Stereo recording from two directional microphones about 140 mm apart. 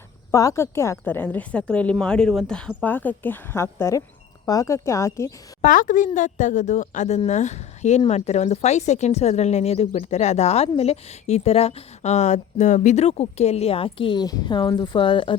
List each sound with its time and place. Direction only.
0.3 s a woman's voice: 20° left (ahead or behind)
5.6 s a woman's voice: 70° left (ahead or behind); by 15.4 s 35° left (ahead or behind)